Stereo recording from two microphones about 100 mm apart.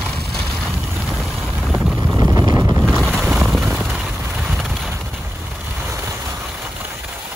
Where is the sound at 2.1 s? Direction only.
30° right (ahead or behind).